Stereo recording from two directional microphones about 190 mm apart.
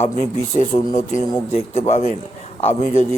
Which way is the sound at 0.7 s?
30° left (ahead or behind).